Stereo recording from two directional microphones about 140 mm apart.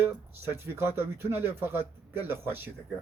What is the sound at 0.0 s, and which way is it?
Speech, 15° right (ahead or behind).